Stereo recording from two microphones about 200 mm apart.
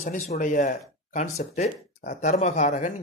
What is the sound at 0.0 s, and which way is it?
Speech, 40° left (ahead or behind).